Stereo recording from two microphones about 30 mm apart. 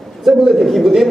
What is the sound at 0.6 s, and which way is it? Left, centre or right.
Speech, centre.